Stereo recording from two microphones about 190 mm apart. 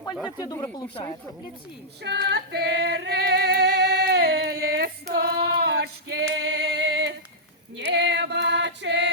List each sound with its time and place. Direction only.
0.3 s speech: 20° left (ahead or behind)
2.0 s female singing: 60° right (ahead or behind)